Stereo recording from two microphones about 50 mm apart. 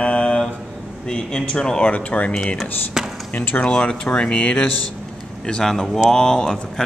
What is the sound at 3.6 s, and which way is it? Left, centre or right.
Speech, left.